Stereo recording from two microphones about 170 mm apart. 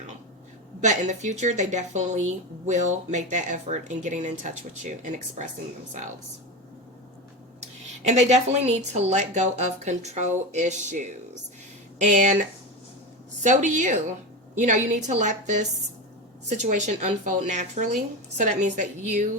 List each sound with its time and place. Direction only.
0.8 s speech: 45° right (ahead or behind)
8.0 s speech: 40° right (ahead or behind)